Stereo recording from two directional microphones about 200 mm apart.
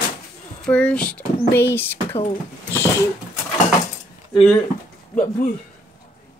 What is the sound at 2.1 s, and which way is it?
Speech, 25° left (ahead or behind).